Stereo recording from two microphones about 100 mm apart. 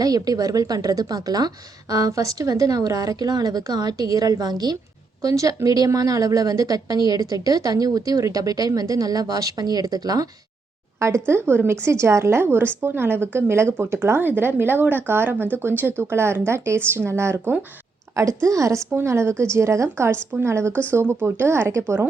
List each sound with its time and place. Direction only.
0.0 s speech: 40° right (ahead or behind)
11.0 s a woman's voice: 25° right (ahead or behind)